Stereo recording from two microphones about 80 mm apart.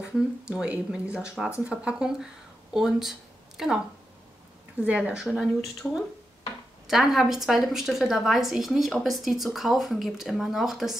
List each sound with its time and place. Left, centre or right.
0.0 s speech: centre
4.8 s speech: centre
5.2 s a woman's voice: centre